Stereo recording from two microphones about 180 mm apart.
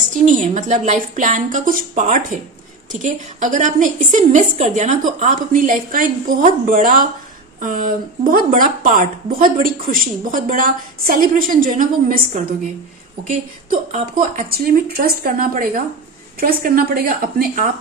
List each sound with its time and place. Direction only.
0.4 s a woman's voice: 45° right (ahead or behind)
13.9 s a woman's voice: 50° right (ahead or behind)